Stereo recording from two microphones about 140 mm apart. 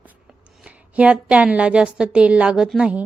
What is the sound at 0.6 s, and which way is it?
A woman's voice, 10° right (ahead or behind).